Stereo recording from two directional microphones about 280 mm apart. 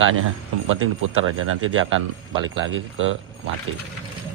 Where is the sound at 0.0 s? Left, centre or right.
Right.